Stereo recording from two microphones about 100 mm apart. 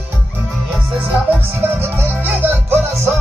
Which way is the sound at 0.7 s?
10° right (ahead or behind).